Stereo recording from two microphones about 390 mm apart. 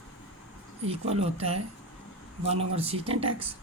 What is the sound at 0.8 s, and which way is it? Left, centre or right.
Speech, centre.